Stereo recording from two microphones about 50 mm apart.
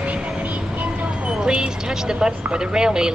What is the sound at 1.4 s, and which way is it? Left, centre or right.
A woman's voice, centre.